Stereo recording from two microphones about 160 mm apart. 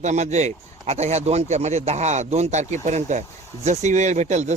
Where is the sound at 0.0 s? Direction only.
45° right (ahead or behind).